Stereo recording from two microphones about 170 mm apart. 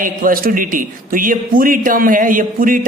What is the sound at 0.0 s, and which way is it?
A man's voice, 55° right (ahead or behind).